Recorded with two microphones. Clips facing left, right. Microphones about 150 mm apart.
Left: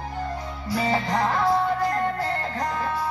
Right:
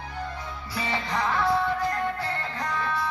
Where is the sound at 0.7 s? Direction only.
45° left (ahead or behind).